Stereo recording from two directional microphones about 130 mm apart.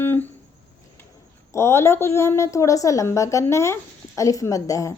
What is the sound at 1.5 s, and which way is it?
A woman's voice, 20° left (ahead or behind).